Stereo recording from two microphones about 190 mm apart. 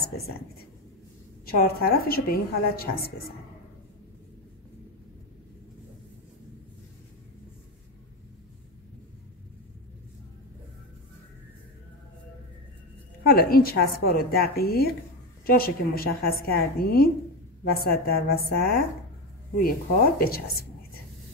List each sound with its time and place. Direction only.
1.4 s a woman's voice: 50° left (ahead or behind)
13.2 s a woman's voice: 50° left (ahead or behind)